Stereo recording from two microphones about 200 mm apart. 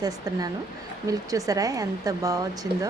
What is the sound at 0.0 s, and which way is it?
A woman's voice, 20° right (ahead or behind).